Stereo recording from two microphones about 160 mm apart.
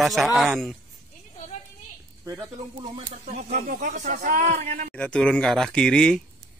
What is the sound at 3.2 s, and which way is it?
Speech, 55° right (ahead or behind).